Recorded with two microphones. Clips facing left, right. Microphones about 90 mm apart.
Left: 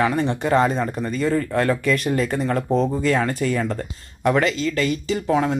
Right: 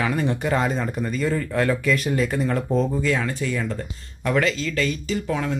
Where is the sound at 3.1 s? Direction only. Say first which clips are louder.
Left 4 dB; 45° left (ahead or behind).